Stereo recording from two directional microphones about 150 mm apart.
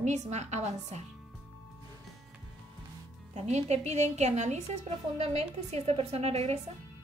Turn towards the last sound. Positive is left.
turn(degrees=-45)  # may be behind; listen again after turning